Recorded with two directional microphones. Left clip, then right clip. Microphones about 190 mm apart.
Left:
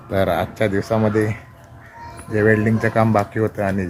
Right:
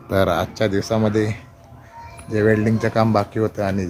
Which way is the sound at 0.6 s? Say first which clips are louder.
Left 2 dB; 5° right (ahead or behind).